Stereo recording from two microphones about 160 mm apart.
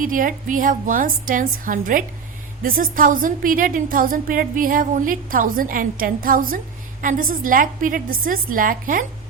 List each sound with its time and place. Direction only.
0.0 s a woman's voice: 55° right (ahead or behind)